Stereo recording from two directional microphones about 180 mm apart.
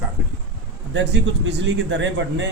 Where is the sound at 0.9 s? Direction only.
75° right (ahead or behind).